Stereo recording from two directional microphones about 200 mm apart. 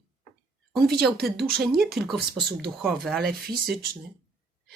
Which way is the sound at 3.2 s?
50° right (ahead or behind).